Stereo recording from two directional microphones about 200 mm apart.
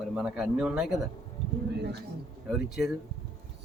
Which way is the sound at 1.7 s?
55° right (ahead or behind).